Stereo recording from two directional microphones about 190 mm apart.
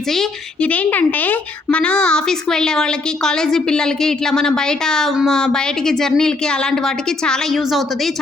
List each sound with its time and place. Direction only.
0.1 s speech: 5° left (ahead or behind)